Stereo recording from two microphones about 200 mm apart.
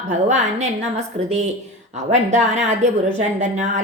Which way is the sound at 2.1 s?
35° right (ahead or behind).